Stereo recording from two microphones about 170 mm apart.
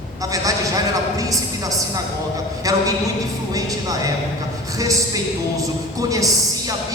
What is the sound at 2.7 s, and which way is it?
A man's voice, 20° right (ahead or behind).